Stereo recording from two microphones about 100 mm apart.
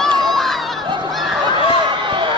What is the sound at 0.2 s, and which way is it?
Crowd, centre (ahead or behind).